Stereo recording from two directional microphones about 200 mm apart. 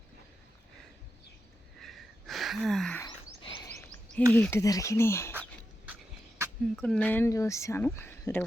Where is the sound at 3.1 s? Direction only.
20° left (ahead or behind).